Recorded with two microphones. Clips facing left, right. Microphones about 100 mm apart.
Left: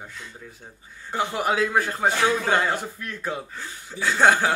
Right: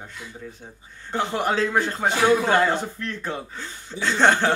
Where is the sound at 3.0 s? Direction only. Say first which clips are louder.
Right 1 dB; 10° left (ahead or behind).